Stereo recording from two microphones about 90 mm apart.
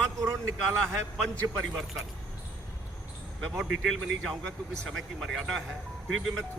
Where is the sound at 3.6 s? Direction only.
Centre (ahead or behind).